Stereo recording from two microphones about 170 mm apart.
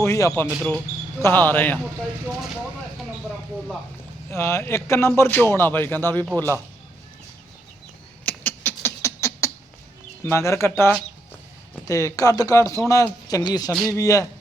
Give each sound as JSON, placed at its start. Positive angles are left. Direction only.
{"t": 0.0, "sound": "speech", "side_deg": 15}
{"t": 0.4, "sound": "speech", "side_deg": -5}
{"t": 1.2, "sound": "speech", "side_deg": 10}
{"t": 4.3, "sound": "speech", "side_deg": 15}
{"t": 6.3, "sound": "speech", "side_deg": -20}
{"t": 8.2, "sound": "rodents", "side_deg": 10}
{"t": 10.2, "sound": "speech", "side_deg": 15}